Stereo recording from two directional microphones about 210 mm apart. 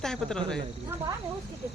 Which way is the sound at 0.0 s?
5° left (ahead or behind).